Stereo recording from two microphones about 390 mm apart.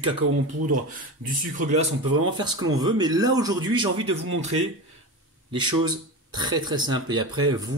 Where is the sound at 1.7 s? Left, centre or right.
Right.